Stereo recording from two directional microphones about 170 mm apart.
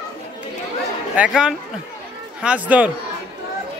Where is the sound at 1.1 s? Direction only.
5° right (ahead or behind).